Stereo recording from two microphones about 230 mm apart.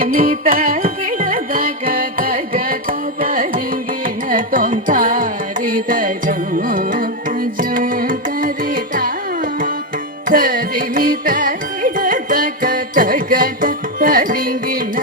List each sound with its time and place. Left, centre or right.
0.0 s music: right
3.2 s carnatic music: right